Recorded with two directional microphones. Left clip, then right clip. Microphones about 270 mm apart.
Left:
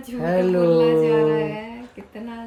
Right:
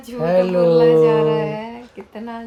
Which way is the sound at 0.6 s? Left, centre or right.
Right.